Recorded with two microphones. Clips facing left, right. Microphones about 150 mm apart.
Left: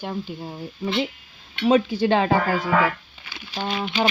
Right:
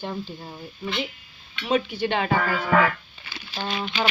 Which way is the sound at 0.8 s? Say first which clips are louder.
Left 5 dB; 25° left (ahead or behind).